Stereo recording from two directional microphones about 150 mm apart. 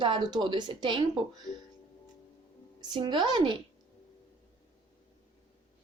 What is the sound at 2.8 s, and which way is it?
Speech, 30° right (ahead or behind).